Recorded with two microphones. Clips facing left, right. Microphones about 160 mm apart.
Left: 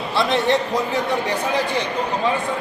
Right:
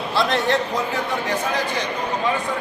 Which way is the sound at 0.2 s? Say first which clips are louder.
Left 2 dB; centre (ahead or behind).